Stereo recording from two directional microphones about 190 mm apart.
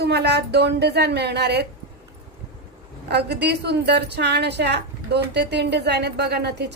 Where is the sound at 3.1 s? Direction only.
60° right (ahead or behind).